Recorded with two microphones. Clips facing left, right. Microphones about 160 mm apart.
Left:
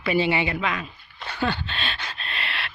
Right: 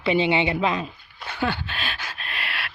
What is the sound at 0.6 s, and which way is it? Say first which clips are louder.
Speech: right 4 dB; 30° right (ahead or behind).